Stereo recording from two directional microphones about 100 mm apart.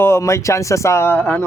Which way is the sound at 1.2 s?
10° left (ahead or behind).